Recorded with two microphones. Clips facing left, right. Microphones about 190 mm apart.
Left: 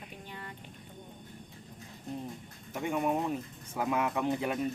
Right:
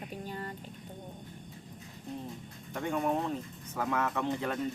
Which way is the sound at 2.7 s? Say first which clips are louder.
Even; 10° left (ahead or behind).